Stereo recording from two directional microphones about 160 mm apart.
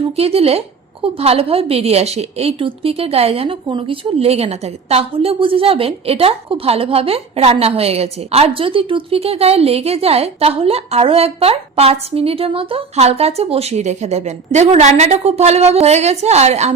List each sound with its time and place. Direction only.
0.0 s a woman's voice: 40° right (ahead or behind)